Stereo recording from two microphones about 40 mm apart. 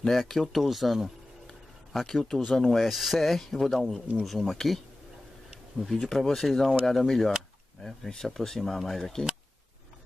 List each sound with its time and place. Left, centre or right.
0.1 s speech: centre
2.0 s speech: centre
5.9 s speech: centre
6.1 s speech: centre